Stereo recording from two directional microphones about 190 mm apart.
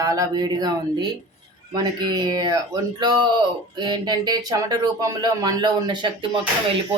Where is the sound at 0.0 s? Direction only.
15° right (ahead or behind).